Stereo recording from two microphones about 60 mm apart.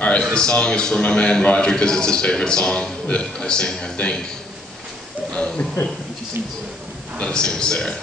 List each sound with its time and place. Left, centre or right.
0.2 s a man's voice: centre
5.3 s a man's voice: centre
7.2 s a man's voice: centre